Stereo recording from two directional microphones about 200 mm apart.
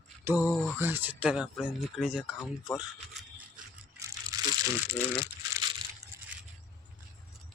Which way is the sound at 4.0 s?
20° right (ahead or behind).